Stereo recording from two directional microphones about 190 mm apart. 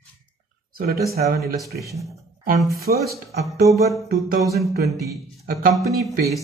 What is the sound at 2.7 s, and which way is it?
Speech, 55° right (ahead or behind).